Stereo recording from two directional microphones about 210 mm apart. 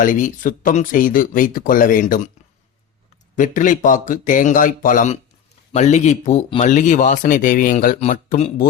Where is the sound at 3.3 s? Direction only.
35° left (ahead or behind).